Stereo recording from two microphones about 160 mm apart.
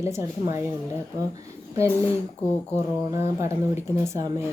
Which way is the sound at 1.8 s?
15° right (ahead or behind).